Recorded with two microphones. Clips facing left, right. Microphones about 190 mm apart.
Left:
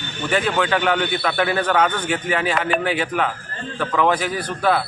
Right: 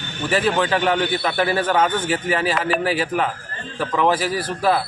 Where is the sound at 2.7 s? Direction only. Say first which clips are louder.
Even; 35° right (ahead or behind).